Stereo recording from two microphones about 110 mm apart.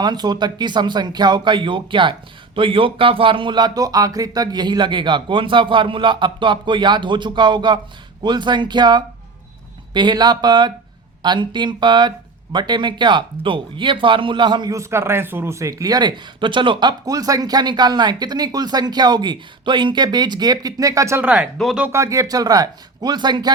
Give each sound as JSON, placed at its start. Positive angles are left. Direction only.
{"t": 0.0, "sound": "speech", "side_deg": -40}
{"t": 14.7, "sound": "speech", "side_deg": -25}
{"t": 21.2, "sound": "speech", "side_deg": -10}
{"t": 21.9, "sound": "speech", "side_deg": -30}